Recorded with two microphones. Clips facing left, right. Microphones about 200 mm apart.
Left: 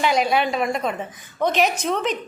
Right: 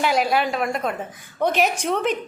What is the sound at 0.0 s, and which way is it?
A woman's voice, 5° right (ahead or behind).